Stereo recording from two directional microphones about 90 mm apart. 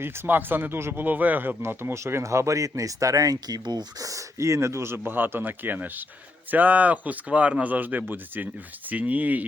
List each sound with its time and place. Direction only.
0.0 s a man's voice: 20° right (ahead or behind)